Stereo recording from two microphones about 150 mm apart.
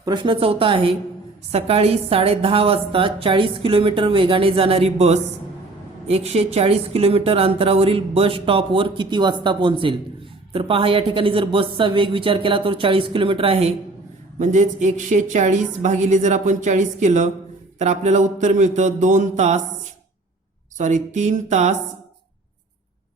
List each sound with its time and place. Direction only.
0.0 s a woman's voice: 30° right (ahead or behind)
14.3 s a woman's voice: 55° right (ahead or behind)
20.7 s a woman's voice: 55° right (ahead or behind)